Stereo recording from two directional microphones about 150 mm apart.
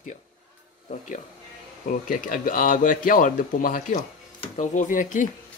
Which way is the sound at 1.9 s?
65° left (ahead or behind).